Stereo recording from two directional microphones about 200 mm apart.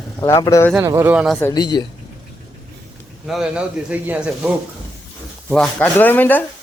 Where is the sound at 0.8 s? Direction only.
15° right (ahead or behind).